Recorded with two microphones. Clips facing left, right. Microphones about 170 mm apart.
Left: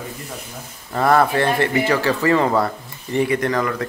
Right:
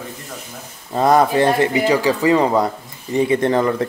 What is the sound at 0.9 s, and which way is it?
Speech, 20° right (ahead or behind).